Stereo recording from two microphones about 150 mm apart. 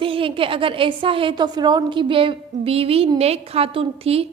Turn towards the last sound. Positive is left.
turn(degrees=-40)  # may be behind; listen again after turning